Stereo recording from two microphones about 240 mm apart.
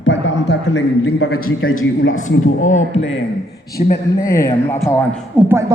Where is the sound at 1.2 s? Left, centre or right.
Left.